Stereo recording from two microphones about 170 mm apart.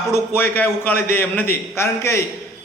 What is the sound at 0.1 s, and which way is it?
A man's voice, 10° left (ahead or behind).